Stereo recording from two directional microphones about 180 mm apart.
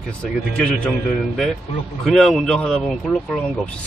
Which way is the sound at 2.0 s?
Centre (ahead or behind).